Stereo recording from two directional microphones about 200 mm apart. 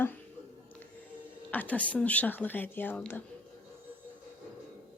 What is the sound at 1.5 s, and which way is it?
Speech, 10° left (ahead or behind).